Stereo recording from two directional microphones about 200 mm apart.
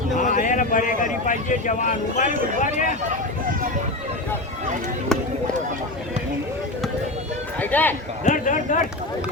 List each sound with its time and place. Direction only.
0.2 s a man's voice: 40° left (ahead or behind)
7.6 s a man's voice: 10° left (ahead or behind)
8.2 s speech: 40° left (ahead or behind)